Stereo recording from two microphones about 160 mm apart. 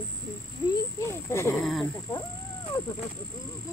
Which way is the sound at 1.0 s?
15° left (ahead or behind).